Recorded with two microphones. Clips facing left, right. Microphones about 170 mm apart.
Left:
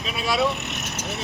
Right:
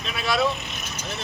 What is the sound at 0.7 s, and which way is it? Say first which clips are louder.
Vehicle: left 4 dB; 80° left.